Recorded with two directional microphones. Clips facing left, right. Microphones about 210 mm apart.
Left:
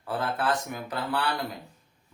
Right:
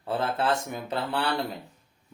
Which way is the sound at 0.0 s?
25° right (ahead or behind).